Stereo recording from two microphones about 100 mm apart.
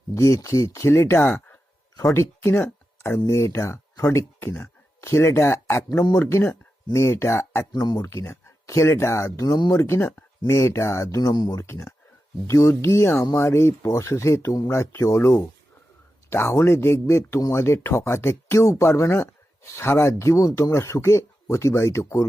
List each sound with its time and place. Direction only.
0.1 s speech: 30° left (ahead or behind)
7.7 s speech: 40° left (ahead or behind)
9.8 s speech: 25° left (ahead or behind)